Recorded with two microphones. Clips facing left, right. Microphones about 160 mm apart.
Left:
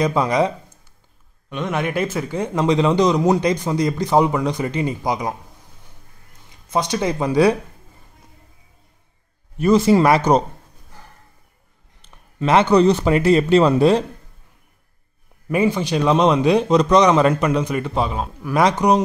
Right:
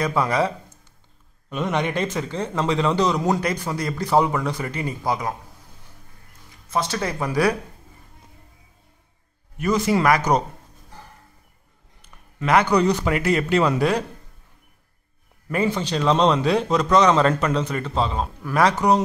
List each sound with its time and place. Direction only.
0.0 s a man's voice: 20° left (ahead or behind)
1.5 s a man's voice: centre (ahead or behind); by 5.3 s 15° left (ahead or behind)
6.7 s speech: 20° left (ahead or behind)
9.6 s speech: 30° left (ahead or behind)
12.0 s a man's voice: 25° left (ahead or behind)
15.4 s a man's voice: 15° left (ahead or behind)